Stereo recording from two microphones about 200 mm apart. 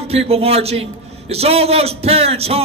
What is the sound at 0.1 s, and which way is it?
A man's voice, 30° right (ahead or behind).